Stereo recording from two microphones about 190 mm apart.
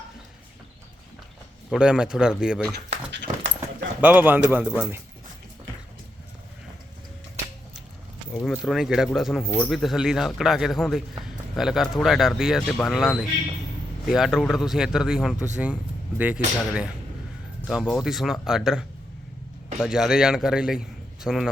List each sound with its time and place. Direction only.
1.7 s a man's voice: 5° right (ahead or behind)
2.7 s speech: 65° right (ahead or behind)
4.0 s speech: 10° right (ahead or behind)
8.4 s a man's voice: centre (ahead or behind)